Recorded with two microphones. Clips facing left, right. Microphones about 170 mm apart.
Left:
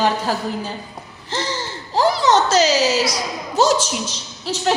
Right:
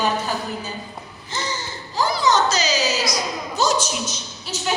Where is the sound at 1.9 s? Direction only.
75° left (ahead or behind).